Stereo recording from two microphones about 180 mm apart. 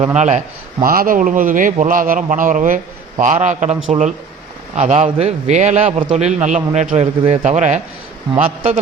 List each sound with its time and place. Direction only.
0.2 s a man's voice: 40° right (ahead or behind)